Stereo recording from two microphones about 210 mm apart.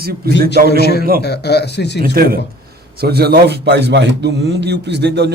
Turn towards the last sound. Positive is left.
turn(degrees=-55)  # may be behind; listen again after turning